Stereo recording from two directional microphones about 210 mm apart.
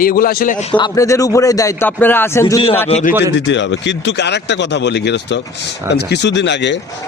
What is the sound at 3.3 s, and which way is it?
A man's voice, 60° left (ahead or behind).